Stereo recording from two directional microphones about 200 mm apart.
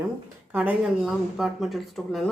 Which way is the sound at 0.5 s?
10° right (ahead or behind).